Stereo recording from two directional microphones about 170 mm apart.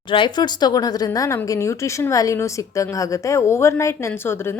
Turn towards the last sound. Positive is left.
turn(degrees=15)  # may be behind; listen again after turning